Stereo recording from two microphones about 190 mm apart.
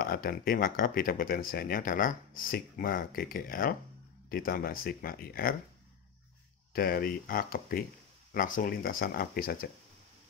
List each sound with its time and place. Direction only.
0.0 s speech: 50° left (ahead or behind)
6.7 s speech: 50° left (ahead or behind)